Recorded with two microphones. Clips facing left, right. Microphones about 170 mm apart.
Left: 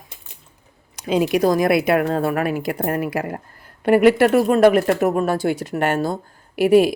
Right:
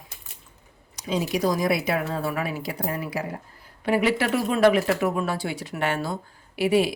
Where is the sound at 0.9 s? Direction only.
65° left (ahead or behind).